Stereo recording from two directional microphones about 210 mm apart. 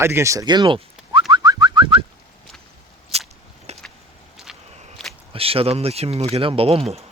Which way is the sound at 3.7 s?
30° right (ahead or behind).